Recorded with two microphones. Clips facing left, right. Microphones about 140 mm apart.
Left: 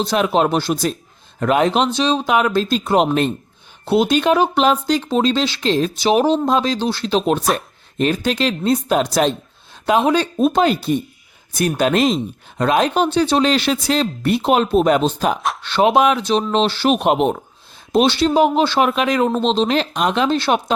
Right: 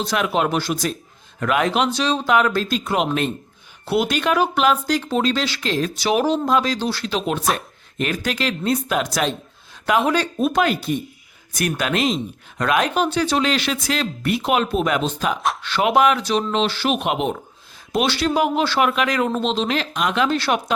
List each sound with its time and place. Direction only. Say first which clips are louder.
0.0 s speech: left 4 dB; 30° left (ahead or behind)
3.8 s speech: left 5 dB; 25° left (ahead or behind); by 17.3 s 40° left (ahead or behind)
17.9 s speech: left 5 dB; 25° left (ahead or behind)